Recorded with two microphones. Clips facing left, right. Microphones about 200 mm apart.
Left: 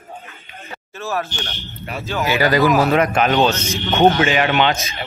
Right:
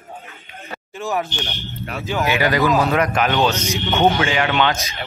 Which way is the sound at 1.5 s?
Centre (ahead or behind).